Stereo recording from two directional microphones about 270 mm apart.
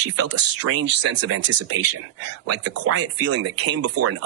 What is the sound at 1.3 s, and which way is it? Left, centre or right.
Speech, right.